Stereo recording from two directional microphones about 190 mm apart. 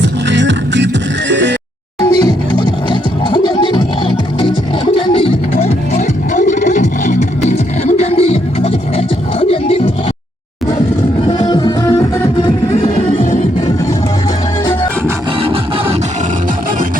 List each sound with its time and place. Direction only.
0.0 s music: 70° right (ahead or behind)
1.3 s bleat: 65° right (ahead or behind)
2.0 s music: 20° left (ahead or behind)
4.9 s music: 30° left (ahead or behind)
11.3 s music: 25° left (ahead or behind)
13.1 s music: 35° left (ahead or behind)
15.4 s music: 30° right (ahead or behind)